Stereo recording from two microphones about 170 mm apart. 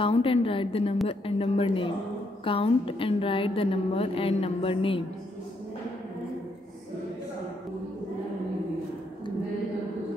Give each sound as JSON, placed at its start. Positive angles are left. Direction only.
{"t": 0.0, "sound": "a woman's voice", "side_deg": 30}